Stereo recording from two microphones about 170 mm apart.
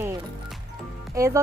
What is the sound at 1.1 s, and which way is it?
Speech, 20° right (ahead or behind).